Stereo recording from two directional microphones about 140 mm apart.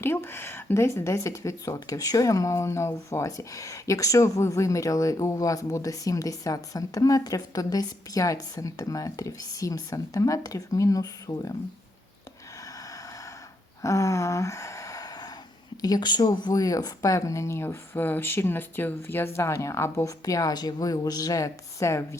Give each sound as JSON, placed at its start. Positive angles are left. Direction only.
{"t": 0.0, "sound": "speech", "side_deg": 15}
{"t": 13.8, "sound": "a sound", "side_deg": 20}
{"t": 15.8, "sound": "speech", "side_deg": 30}